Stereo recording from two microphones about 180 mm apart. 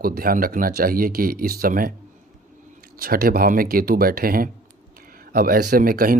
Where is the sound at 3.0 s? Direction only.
55° right (ahead or behind).